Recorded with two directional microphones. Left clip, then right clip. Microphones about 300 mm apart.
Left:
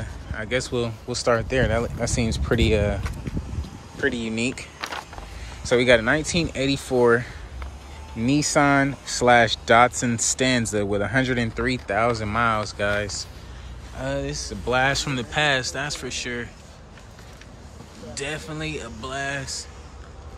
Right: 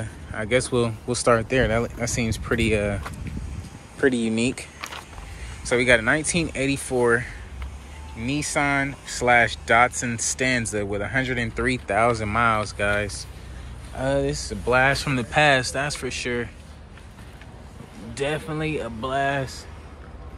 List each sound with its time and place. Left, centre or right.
0.0 s speech: centre
4.7 s a sound: left
5.6 s speech: centre
18.1 s speech: centre